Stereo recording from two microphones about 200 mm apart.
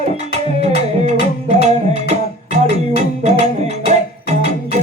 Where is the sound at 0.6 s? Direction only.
35° right (ahead or behind).